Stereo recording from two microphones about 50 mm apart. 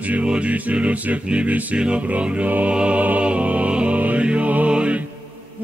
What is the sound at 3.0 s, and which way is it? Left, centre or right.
Music, right.